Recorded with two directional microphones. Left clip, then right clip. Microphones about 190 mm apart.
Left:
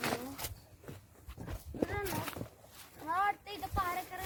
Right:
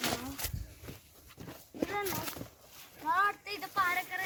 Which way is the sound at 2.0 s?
Centre (ahead or behind).